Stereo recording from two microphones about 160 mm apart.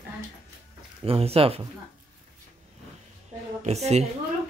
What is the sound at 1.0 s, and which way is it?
Speech, 40° right (ahead or behind).